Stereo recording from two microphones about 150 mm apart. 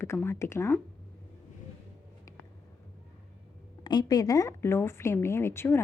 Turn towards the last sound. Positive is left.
turn(degrees=15)  # may be behind; listen again after turning